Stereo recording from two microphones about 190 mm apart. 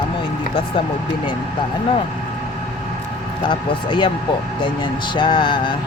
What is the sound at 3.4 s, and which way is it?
Speech, 25° left (ahead or behind).